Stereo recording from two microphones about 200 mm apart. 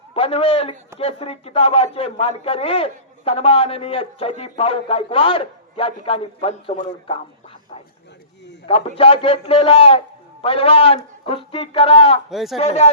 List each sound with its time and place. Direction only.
0.1 s speech: 30° left (ahead or behind)
9.0 s speech: 30° left (ahead or behind)
12.3 s speech: centre (ahead or behind)
12.5 s speech: 35° left (ahead or behind)